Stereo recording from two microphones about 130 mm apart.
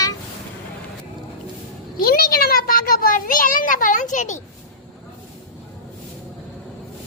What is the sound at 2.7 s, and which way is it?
Speech, 90° left.